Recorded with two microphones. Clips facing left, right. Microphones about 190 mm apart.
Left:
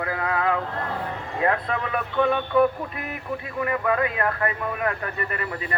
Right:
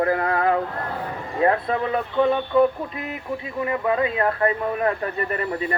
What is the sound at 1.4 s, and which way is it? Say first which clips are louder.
Speech: right 4 dB; 30° right (ahead or behind).